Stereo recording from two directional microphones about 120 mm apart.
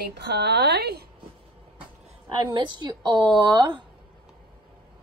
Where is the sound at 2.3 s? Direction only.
40° right (ahead or behind).